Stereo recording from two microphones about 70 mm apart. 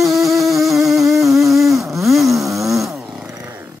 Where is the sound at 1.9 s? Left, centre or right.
Centre.